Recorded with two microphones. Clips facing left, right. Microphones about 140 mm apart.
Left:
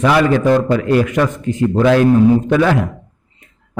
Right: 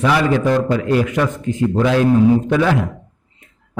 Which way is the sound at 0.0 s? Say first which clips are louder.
Left 3 dB; 60° left (ahead or behind).